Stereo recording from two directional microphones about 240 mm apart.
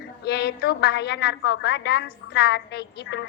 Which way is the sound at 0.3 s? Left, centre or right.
Left.